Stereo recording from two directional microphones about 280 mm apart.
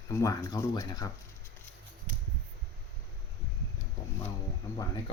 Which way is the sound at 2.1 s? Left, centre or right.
Right.